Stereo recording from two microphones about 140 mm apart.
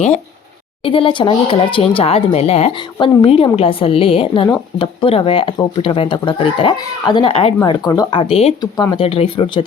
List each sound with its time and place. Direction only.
0.9 s speech: 40° left (ahead or behind)
7.6 s speech: 25° left (ahead or behind)
8.1 s speech: 45° left (ahead or behind)
8.6 s speech: 25° left (ahead or behind)
9.0 s speech: 40° left (ahead or behind)